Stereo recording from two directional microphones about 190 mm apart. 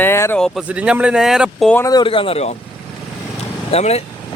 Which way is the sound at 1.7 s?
15° left (ahead or behind).